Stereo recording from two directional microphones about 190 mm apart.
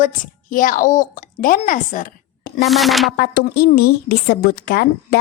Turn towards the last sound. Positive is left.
turn(degrees=55)  # may be behind; listen again after turning